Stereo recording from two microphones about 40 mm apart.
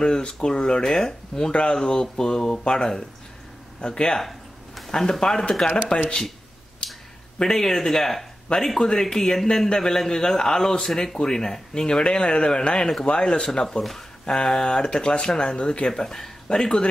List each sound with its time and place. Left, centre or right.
0.0 s speech: centre
1.5 s speech: left
4.2 s a sound: centre
5.2 s speech: left
6.8 s a sound: left
7.3 s speech: centre
14.2 s speech: centre
15.9 s speech: centre